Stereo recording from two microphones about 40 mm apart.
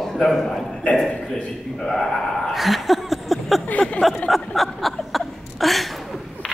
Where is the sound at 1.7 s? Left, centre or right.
Centre.